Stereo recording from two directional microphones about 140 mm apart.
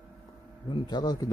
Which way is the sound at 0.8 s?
30° left (ahead or behind).